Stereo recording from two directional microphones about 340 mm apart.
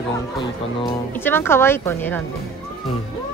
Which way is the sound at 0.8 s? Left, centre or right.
Centre.